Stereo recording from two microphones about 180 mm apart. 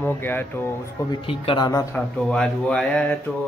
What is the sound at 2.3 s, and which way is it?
Speech, 5° left (ahead or behind).